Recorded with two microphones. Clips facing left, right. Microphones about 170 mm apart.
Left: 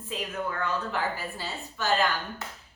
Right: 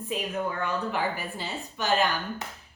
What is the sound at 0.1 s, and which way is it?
A woman's voice, 15° right (ahead or behind).